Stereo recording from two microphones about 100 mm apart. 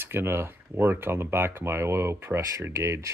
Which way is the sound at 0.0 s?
25° right (ahead or behind).